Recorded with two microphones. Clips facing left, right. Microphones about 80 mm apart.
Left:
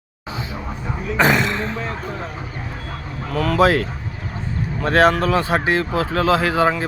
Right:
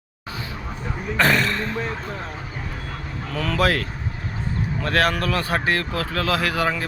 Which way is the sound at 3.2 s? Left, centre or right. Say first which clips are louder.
Left 5 dB; centre.